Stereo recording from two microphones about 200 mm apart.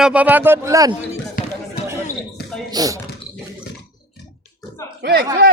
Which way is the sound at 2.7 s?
20° right (ahead or behind).